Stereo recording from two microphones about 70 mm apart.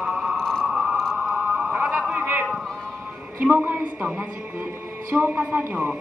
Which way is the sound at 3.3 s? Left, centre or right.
Right.